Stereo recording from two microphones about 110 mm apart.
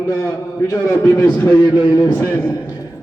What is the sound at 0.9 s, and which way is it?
Speech, 20° left (ahead or behind).